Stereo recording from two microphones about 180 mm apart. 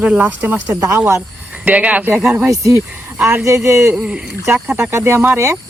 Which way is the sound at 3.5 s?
15° right (ahead or behind).